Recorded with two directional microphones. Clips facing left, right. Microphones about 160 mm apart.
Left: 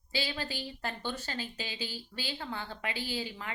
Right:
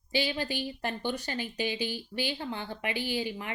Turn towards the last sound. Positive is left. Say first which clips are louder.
# right 5 dB
turn(degrees=-15)  # may be behind; listen again after turning